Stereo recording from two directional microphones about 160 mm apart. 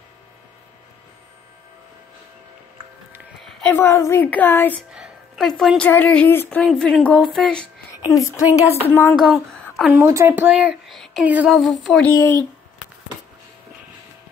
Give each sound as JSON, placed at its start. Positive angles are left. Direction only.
{"t": 3.4, "sound": "a woman's voice", "side_deg": 10}
{"t": 4.9, "sound": "a sound", "side_deg": -5}
{"t": 5.9, "sound": "a woman's voice", "side_deg": 10}
{"t": 7.9, "sound": "a woman's voice", "side_deg": 20}
{"t": 9.2, "sound": "speech", "side_deg": 0}
{"t": 10.0, "sound": "speech", "side_deg": -15}
{"t": 12.1, "sound": "speech", "side_deg": 20}